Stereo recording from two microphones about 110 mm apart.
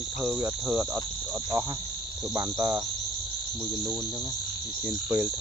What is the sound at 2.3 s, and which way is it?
Frog, 25° right (ahead or behind).